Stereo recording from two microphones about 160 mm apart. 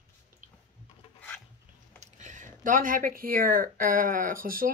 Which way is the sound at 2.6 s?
55° right (ahead or behind).